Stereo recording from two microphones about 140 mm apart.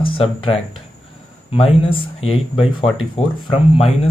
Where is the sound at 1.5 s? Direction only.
40° left (ahead or behind).